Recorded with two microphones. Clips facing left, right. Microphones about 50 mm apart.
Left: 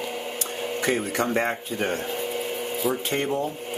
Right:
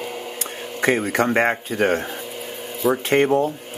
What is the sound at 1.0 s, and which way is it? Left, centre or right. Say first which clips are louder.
Speech: right 5 dB; right.